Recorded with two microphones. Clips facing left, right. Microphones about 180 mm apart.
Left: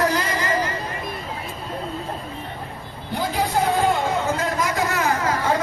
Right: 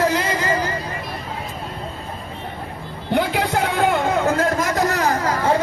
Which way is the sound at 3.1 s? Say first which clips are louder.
Right 4 dB; 70° right (ahead or behind).